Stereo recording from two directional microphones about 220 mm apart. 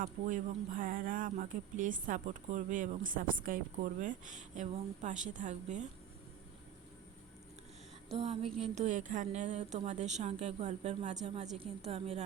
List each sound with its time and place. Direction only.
0.0 s a woman's voice: 35° right (ahead or behind)
8.1 s a woman's voice: 25° right (ahead or behind)